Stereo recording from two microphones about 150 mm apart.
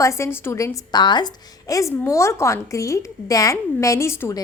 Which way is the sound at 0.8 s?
30° left (ahead or behind).